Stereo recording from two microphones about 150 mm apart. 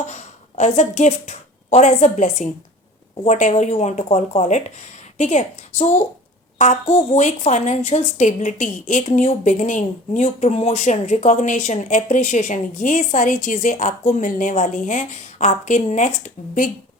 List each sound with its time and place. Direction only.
0.1 s a woman's voice: 50° left (ahead or behind)